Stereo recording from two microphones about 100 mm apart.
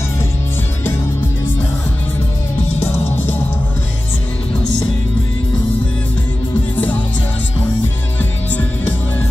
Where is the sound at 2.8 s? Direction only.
20° left (ahead or behind).